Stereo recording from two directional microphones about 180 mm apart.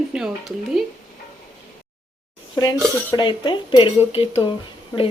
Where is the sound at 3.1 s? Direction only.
25° left (ahead or behind).